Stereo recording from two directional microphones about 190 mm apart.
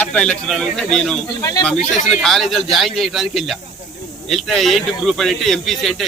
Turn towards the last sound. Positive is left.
turn(degrees=0)  # may be behind; listen again after turning